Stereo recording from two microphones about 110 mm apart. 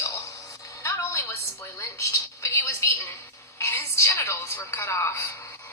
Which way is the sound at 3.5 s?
25° left (ahead or behind).